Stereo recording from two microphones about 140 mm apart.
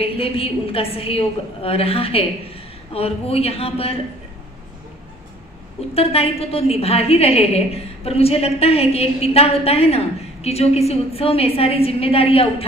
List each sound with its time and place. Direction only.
0.0 s a woman's voice: 40° left (ahead or behind)
5.9 s a woman's voice: 45° left (ahead or behind)